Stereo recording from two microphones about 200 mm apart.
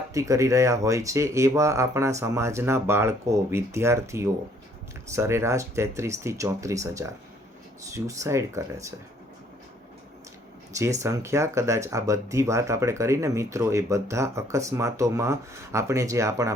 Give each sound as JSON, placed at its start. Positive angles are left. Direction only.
{"t": 0.1, "sound": "speech", "side_deg": -15}
{"t": 10.8, "sound": "speech", "side_deg": -15}